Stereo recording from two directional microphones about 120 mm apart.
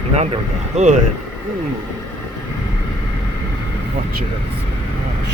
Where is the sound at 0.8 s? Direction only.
90° right.